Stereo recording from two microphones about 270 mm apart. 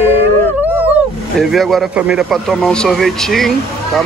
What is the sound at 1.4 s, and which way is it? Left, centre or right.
Speech, centre.